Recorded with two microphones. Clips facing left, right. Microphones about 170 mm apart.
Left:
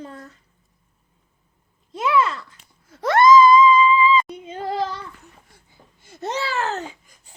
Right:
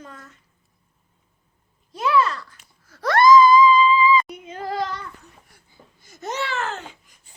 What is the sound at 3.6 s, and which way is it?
Music, 25° left (ahead or behind).